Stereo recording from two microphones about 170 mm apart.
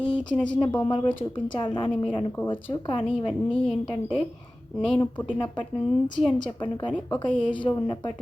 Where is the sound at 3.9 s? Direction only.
30° left (ahead or behind).